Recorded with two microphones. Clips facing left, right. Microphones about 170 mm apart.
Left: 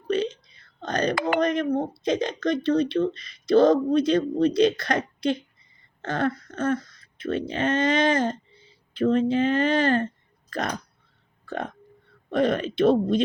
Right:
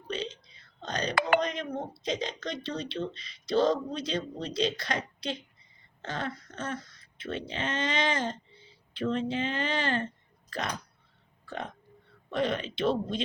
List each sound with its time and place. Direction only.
0.1 s burping: 55° left (ahead or behind)
0.8 s speech: 55° left (ahead or behind)
11.4 s burping: 50° left (ahead or behind)
12.3 s speech: 45° left (ahead or behind)